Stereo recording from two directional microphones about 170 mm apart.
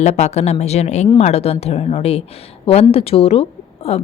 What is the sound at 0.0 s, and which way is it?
A woman's voice, 40° left (ahead or behind).